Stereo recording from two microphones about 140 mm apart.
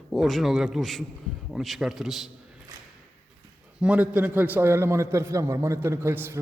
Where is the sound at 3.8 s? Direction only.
10° right (ahead or behind).